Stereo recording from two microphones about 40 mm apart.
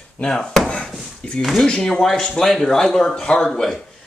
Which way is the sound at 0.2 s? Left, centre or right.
Centre.